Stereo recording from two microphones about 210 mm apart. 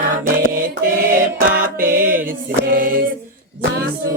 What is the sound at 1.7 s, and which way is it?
Music, 40° right (ahead or behind).